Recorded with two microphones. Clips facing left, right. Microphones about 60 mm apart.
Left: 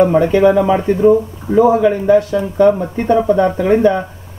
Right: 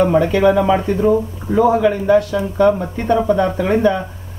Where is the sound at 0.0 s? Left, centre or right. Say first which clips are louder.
Left 3 dB; left.